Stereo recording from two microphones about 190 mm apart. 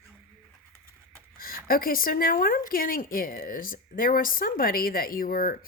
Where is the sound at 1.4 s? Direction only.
50° left (ahead or behind).